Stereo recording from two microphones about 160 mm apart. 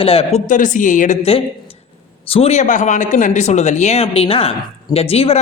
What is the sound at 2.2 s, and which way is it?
Speech, 40° left (ahead or behind).